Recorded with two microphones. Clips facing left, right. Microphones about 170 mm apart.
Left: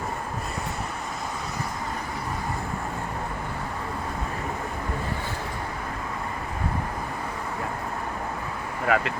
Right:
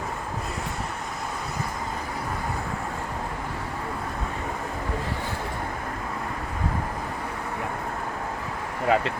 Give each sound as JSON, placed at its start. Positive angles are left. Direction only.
{"t": 8.9, "sound": "speech", "side_deg": -25}